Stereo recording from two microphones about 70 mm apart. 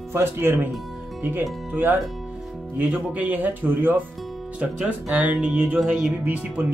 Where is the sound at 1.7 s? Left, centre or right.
Right.